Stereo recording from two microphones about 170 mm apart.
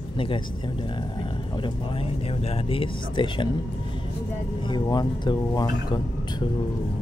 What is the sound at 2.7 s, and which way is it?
Speech, 30° left (ahead or behind).